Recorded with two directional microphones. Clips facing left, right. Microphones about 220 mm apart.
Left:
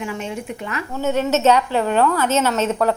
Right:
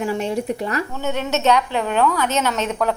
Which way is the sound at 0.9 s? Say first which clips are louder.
Left 4 dB; 5° left (ahead or behind).